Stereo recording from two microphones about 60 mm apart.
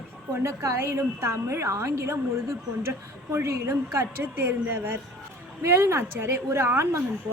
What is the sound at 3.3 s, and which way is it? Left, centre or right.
A woman's voice, right.